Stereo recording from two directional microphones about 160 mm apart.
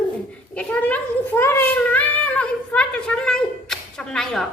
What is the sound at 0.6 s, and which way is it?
Speech, 10° left (ahead or behind).